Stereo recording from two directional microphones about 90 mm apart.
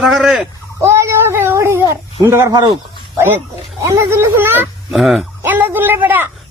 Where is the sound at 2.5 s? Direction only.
55° right (ahead or behind).